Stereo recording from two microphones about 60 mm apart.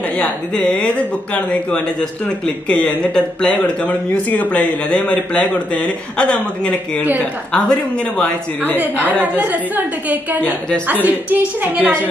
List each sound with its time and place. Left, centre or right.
0.2 s speech: centre
3.8 s speech: left
9.2 s a woman's voice: right